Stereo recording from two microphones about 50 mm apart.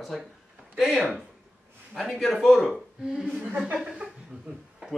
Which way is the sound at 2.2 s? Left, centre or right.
Centre.